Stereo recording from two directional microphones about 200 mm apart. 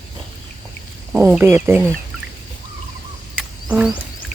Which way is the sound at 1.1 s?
10° right (ahead or behind).